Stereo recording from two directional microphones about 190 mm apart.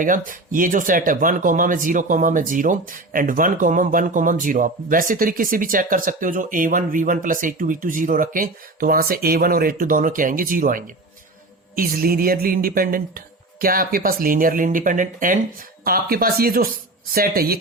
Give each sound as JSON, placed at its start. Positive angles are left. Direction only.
{"t": 0.0, "sound": "speech", "side_deg": -45}